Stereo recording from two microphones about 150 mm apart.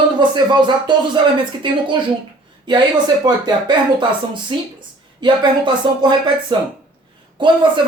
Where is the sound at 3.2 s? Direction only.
30° right (ahead or behind).